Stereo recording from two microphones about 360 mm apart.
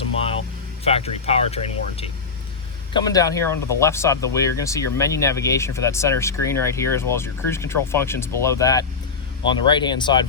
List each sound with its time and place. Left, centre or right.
0.9 s speech: centre